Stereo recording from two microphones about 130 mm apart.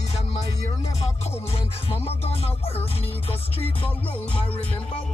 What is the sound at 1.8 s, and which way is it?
Music, 50° left (ahead or behind).